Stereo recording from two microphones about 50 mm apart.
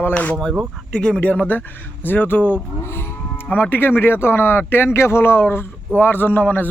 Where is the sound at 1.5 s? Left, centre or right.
Left.